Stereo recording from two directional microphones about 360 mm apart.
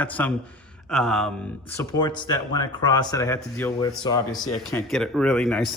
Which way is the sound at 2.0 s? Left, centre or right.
Centre.